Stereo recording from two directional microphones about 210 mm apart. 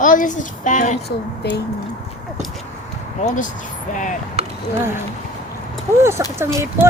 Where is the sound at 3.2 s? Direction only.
35° left (ahead or behind).